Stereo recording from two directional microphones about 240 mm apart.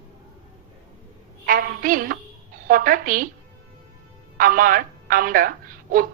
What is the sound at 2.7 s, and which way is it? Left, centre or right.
Speech, right.